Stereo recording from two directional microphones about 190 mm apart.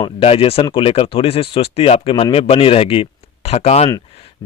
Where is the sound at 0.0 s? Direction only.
30° left (ahead or behind).